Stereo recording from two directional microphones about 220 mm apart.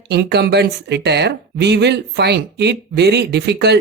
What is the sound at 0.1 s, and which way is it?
Speech, 50° right (ahead or behind).